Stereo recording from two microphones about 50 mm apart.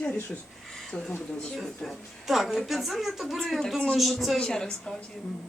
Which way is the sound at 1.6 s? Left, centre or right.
Centre.